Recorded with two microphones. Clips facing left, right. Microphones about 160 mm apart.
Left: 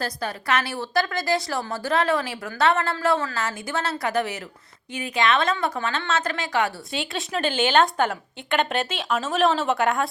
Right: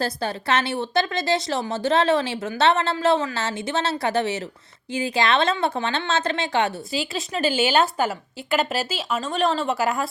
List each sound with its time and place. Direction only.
0.0 s a woman's voice: 30° right (ahead or behind)
6.9 s a woman's voice: centre (ahead or behind)